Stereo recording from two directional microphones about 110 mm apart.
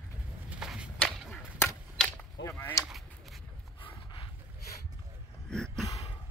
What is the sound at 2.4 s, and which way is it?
Speech, 20° left (ahead or behind).